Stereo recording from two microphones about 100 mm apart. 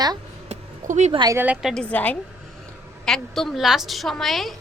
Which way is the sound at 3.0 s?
5° left (ahead or behind).